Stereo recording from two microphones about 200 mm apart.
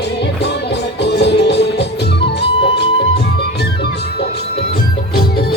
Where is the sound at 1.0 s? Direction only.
55° left (ahead or behind).